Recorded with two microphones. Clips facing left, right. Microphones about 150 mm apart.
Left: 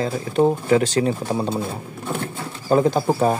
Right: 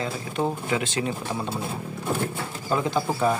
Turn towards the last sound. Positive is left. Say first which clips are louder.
# left 4 dB
turn(degrees=45)  # may be behind; listen again after turning